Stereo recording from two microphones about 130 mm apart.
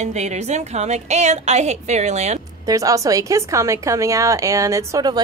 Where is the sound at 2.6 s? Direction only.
25° right (ahead or behind).